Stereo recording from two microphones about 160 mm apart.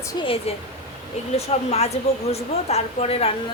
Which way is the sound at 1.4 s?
40° left (ahead or behind).